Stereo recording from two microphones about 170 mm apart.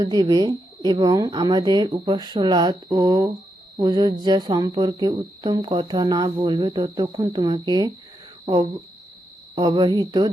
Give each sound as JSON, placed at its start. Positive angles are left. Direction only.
{"t": 0.0, "sound": "speech", "side_deg": -25}